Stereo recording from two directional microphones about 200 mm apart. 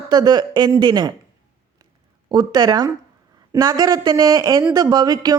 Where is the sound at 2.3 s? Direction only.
20° right (ahead or behind).